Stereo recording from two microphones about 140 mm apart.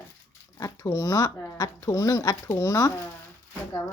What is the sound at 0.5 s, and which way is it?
Speech, 25° left (ahead or behind).